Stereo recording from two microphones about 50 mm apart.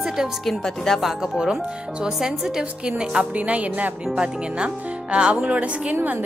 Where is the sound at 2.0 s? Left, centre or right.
Centre.